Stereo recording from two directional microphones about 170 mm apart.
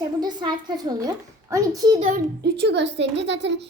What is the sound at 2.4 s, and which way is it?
A child's voice, 80° right.